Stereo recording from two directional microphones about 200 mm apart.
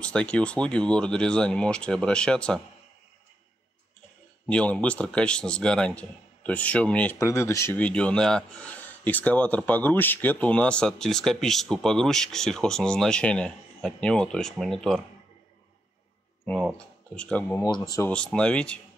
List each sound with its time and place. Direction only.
0.0 s a man's voice: 5° left (ahead or behind)
4.5 s a man's voice: 5° left (ahead or behind)
16.4 s speech: 5° left (ahead or behind)
17.6 s speech: 20° left (ahead or behind)
18.1 s a man's voice: 5° left (ahead or behind)